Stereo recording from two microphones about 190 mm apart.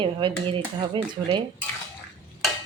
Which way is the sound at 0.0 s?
25° right (ahead or behind).